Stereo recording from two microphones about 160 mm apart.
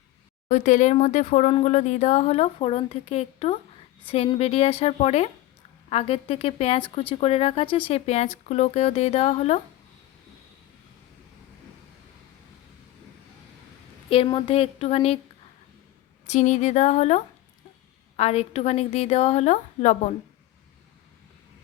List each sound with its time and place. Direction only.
0.4 s a woman's voice: 50° left (ahead or behind)
14.1 s speech: 30° left (ahead or behind)
16.2 s a woman's voice: 45° left (ahead or behind)